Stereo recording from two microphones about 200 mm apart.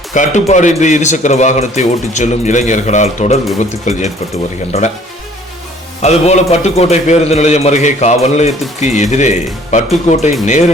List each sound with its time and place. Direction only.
0.1 s a man's voice: 35° left (ahead or behind)
6.0 s a man's voice: 35° left (ahead or behind)